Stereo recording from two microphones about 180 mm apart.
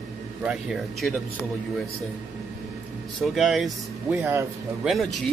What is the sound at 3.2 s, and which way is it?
Speech, centre (ahead or behind).